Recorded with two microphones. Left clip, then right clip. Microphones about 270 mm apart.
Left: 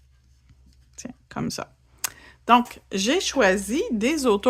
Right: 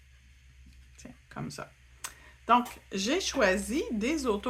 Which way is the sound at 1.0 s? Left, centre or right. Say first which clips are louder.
Left 10 dB; left.